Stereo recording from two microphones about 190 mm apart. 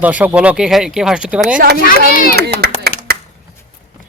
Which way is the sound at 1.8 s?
50° left (ahead or behind).